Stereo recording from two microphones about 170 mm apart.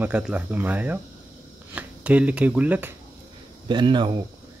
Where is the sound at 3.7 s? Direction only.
25° right (ahead or behind).